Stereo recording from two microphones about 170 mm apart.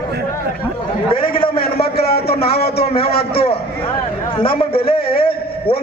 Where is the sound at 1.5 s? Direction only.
65° left (ahead or behind).